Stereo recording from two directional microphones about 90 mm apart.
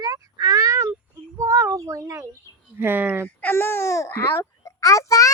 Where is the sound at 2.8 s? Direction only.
20° right (ahead or behind).